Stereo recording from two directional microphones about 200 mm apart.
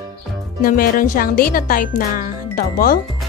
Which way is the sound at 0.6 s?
45° left (ahead or behind).